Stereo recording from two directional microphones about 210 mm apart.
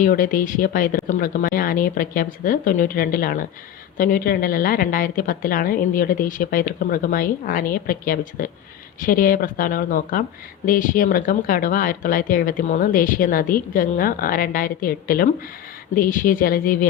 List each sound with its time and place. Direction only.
0.0 s a woman's voice: 40° left (ahead or behind)